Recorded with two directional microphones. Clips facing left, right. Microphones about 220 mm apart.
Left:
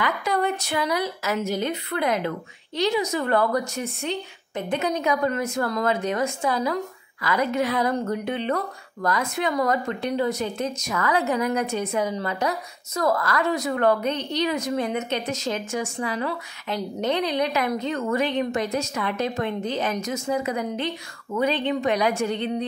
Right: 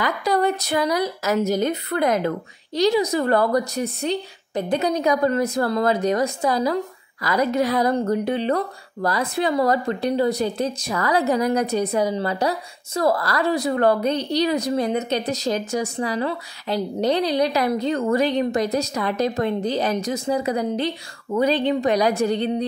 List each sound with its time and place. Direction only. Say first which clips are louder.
0.0 s a woman's voice: right 4 dB; 35° right (ahead or behind)